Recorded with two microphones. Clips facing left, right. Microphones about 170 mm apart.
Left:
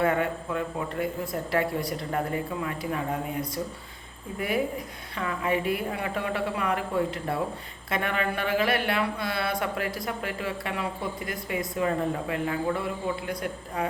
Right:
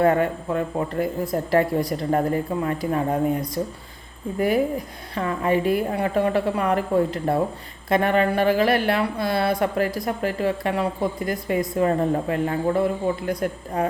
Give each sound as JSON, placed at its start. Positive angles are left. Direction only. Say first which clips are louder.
{"t": 0.0, "sound": "a woman's voice", "louder": "right 6 dB", "side_deg": -40}